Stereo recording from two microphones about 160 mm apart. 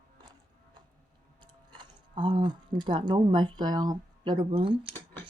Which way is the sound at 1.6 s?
30° right (ahead or behind).